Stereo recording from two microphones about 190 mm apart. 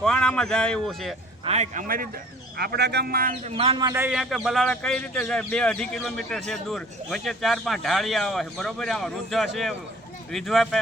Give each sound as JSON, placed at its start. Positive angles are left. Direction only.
{"t": 0.0, "sound": "speech", "side_deg": 5}
{"t": 1.5, "sound": "a man's voice", "side_deg": -35}
{"t": 2.6, "sound": "a man's voice", "side_deg": -55}
{"t": 3.4, "sound": "a man's voice", "side_deg": -30}
{"t": 4.2, "sound": "speech", "side_deg": 0}